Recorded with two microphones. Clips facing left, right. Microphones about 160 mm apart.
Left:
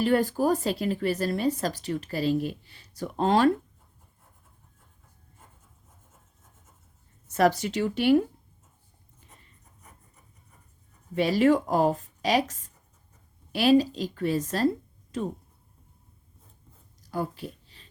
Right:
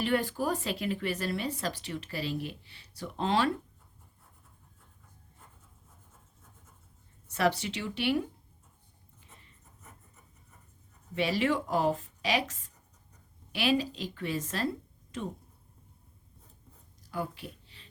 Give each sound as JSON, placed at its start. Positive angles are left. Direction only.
{"t": 0.0, "sound": "speech", "side_deg": 40}
{"t": 7.3, "sound": "speech", "side_deg": 45}
{"t": 11.1, "sound": "speech", "side_deg": 40}
{"t": 17.1, "sound": "a sound", "side_deg": 40}